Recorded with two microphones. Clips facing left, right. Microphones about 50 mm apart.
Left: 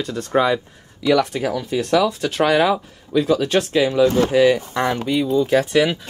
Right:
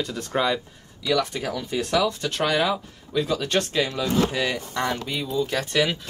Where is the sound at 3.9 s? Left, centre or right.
Centre.